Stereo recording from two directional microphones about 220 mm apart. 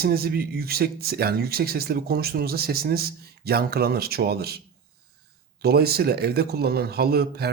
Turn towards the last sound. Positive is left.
turn(degrees=-45)  # may be behind; listen again after turning